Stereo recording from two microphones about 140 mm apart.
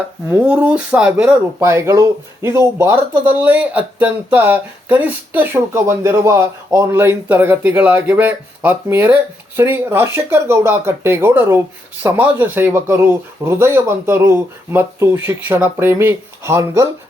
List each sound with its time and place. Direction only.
0.3 s speech: 10° right (ahead or behind)
1.5 s speech: 20° right (ahead or behind)